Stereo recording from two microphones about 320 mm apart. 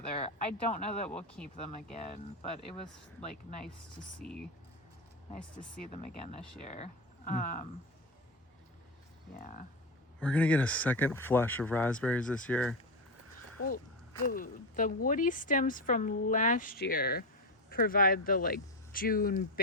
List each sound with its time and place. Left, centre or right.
0.1 s speech: left
4.2 s speech: centre
5.9 s speech: left
9.3 s speech: left
10.2 s speech: centre
13.6 s speech: left